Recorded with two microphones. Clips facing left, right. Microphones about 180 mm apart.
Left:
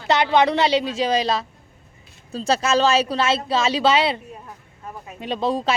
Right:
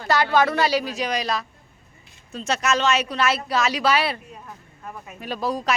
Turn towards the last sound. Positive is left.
turn(degrees=25)  # may be behind; listen again after turning